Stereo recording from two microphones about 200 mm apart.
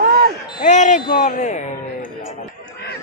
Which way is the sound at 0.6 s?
35° left (ahead or behind).